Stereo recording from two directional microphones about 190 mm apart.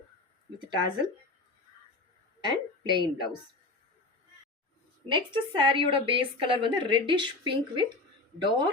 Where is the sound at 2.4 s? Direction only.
25° right (ahead or behind).